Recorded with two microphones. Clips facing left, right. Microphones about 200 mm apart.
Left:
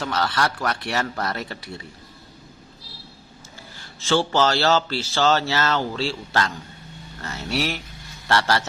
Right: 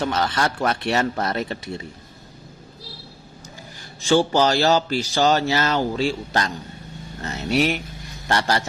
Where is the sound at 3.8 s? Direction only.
15° right (ahead or behind).